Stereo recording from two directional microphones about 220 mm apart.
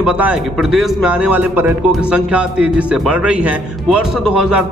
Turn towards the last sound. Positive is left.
turn(degrees=-5)  # may be behind; listen again after turning